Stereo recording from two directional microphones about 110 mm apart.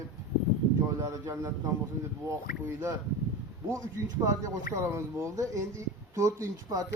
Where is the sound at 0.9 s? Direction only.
30° right (ahead or behind).